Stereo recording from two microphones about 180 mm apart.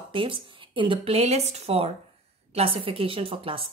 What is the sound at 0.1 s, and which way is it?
A woman's voice, 30° right (ahead or behind).